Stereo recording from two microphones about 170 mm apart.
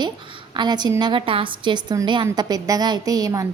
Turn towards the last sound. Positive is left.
turn(degrees=-20)  # may be behind; listen again after turning